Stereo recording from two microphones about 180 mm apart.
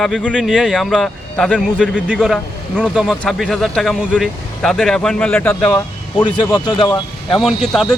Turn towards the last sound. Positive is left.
turn(degrees=5)  # may be behind; listen again after turning